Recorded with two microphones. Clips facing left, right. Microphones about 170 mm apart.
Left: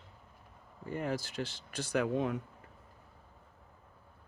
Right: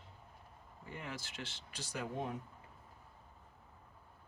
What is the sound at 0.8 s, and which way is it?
Speech, 40° left (ahead or behind).